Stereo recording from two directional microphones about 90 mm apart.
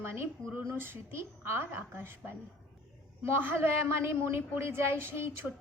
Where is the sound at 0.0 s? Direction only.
25° right (ahead or behind).